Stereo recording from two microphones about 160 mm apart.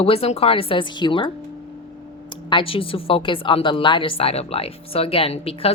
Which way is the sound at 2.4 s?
30° left (ahead or behind).